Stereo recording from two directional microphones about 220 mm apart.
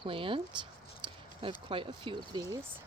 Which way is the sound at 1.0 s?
20° right (ahead or behind).